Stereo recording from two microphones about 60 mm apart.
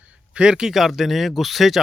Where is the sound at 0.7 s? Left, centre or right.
Centre.